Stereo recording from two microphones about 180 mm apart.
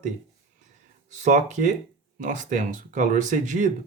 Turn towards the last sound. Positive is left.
turn(degrees=-45)  # may be behind; listen again after turning